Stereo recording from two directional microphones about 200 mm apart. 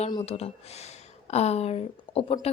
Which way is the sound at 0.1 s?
25° left (ahead or behind).